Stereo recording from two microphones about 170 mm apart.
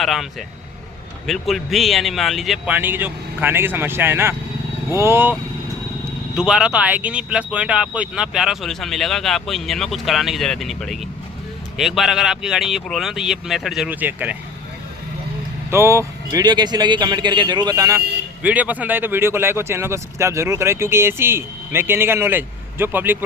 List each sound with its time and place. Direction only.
0.0 s speech: centre (ahead or behind)
15.7 s a man's voice: 15° right (ahead or behind)